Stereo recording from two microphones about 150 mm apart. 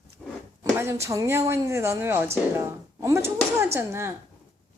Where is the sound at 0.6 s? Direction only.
20° right (ahead or behind).